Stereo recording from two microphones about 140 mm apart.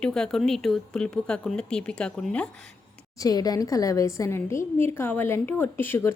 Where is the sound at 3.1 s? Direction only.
25° left (ahead or behind).